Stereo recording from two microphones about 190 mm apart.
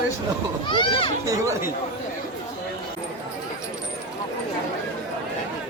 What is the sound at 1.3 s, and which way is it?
Speech, 15° right (ahead or behind).